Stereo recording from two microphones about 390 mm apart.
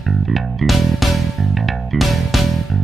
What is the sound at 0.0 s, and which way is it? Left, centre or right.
Music, centre.